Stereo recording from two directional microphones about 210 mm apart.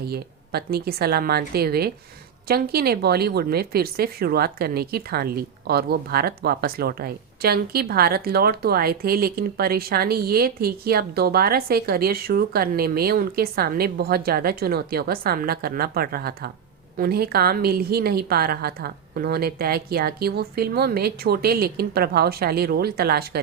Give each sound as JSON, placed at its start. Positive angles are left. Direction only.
{"t": 0.0, "sound": "speech", "side_deg": -50}